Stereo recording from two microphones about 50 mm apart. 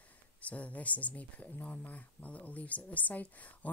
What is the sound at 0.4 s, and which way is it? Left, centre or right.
Speech, left.